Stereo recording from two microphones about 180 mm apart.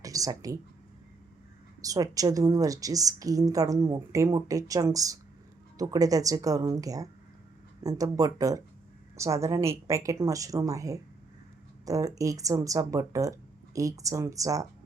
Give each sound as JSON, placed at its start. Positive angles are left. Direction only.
{"t": 0.0, "sound": "speech", "side_deg": -20}
{"t": 1.8, "sound": "a woman's voice", "side_deg": -20}